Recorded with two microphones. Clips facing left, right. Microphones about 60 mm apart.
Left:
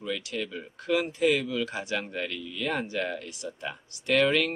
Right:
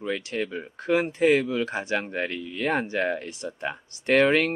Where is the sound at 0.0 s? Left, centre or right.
Right.